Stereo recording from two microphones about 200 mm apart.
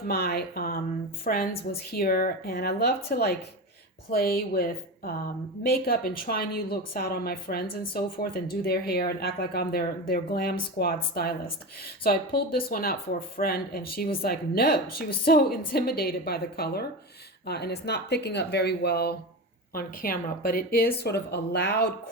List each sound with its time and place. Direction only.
0.1 s a woman's voice: 50° left (ahead or behind)